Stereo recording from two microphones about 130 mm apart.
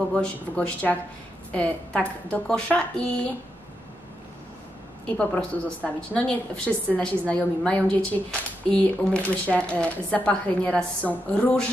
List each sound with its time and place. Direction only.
0.1 s a woman's voice: 10° left (ahead or behind)
5.0 s a woman's voice: 10° left (ahead or behind)